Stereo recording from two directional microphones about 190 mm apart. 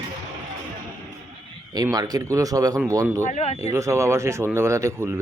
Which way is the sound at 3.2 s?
35° left (ahead or behind).